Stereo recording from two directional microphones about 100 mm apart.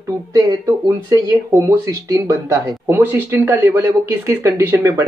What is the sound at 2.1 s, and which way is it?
Speech, 30° right (ahead or behind).